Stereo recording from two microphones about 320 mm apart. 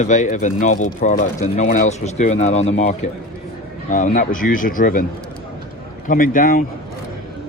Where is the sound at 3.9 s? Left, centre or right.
Left.